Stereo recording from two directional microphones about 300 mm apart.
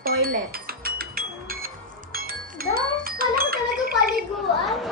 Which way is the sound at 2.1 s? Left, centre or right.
Right.